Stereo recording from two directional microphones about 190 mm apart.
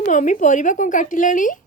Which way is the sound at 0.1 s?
40° left (ahead or behind).